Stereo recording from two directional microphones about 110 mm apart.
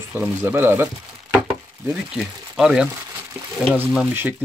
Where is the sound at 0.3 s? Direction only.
20° right (ahead or behind).